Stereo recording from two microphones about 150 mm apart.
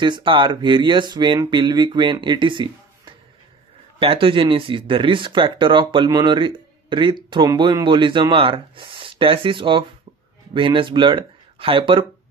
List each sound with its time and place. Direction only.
0.0 s speech: 30° right (ahead or behind)